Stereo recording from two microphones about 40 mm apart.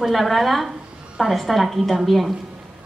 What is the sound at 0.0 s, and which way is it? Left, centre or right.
A woman's voice, centre.